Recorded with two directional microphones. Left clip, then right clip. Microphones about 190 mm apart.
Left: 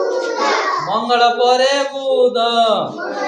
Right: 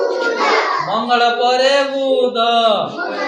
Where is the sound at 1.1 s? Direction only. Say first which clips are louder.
Left 1 dB; 40° left (ahead or behind).